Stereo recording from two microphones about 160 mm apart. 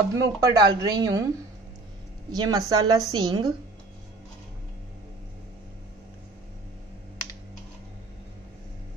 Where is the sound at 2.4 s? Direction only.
25° right (ahead or behind).